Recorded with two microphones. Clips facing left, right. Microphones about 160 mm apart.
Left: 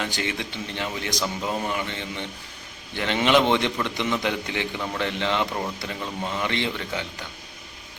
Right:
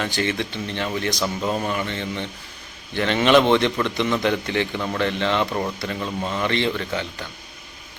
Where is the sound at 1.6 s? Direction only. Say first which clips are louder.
Right 3 dB; 15° left (ahead or behind).